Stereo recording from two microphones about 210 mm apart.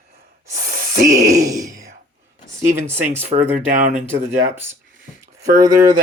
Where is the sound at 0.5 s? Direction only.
40° right (ahead or behind).